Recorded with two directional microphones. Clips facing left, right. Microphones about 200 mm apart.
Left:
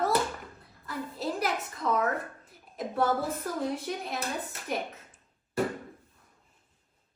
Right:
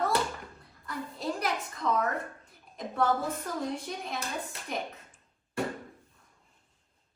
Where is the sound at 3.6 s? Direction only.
5° left (ahead or behind).